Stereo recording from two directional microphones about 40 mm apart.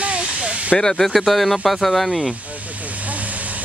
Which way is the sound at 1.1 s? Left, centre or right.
Centre.